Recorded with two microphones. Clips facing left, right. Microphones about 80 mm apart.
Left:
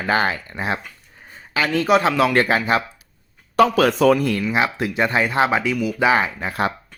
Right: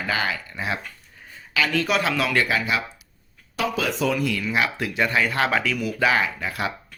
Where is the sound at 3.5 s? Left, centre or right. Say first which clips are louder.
Left 10 dB; left.